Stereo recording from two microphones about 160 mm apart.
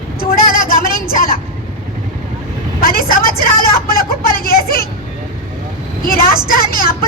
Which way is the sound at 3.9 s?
70° left (ahead or behind).